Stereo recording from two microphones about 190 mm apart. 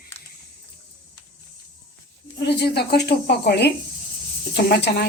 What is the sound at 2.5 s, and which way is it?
Speech, 55° left (ahead or behind).